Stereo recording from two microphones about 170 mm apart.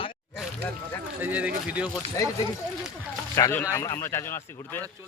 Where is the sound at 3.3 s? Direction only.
15° left (ahead or behind).